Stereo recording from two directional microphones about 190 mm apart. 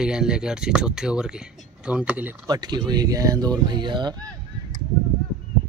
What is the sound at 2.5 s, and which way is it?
Speech, 20° right (ahead or behind).